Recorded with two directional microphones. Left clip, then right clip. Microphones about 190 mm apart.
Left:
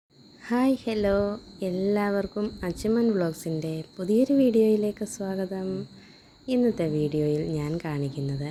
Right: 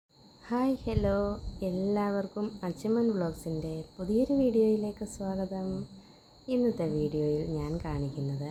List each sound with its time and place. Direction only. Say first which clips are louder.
0.4 s speech: left 5 dB; 20° left (ahead or behind)